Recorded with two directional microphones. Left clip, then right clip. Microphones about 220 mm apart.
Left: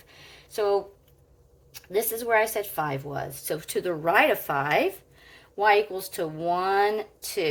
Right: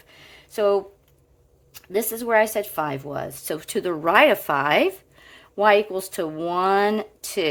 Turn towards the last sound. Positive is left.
turn(degrees=-45)  # may be behind; listen again after turning